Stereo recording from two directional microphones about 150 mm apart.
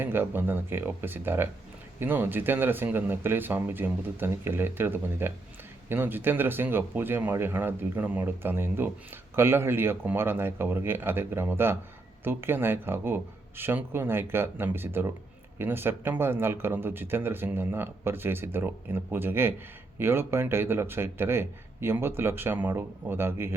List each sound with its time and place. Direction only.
0.0 s speech: 15° right (ahead or behind)